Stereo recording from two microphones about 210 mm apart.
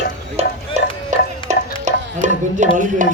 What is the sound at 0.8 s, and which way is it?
Music, 30° right (ahead or behind).